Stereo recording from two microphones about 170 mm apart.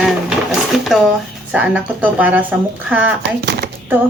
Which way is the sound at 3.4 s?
90° right.